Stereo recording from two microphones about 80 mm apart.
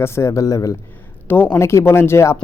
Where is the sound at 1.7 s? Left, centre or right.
Left.